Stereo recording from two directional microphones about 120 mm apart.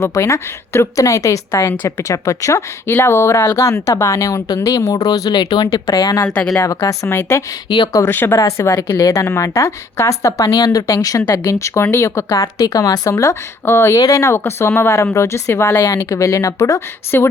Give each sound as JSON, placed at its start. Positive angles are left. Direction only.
{"t": 0.0, "sound": "speech", "side_deg": 25}
{"t": 6.2, "sound": "speech", "side_deg": 10}
{"t": 6.7, "sound": "speech", "side_deg": 25}
{"t": 7.7, "sound": "speech", "side_deg": 35}
{"t": 8.0, "sound": "speech", "side_deg": 20}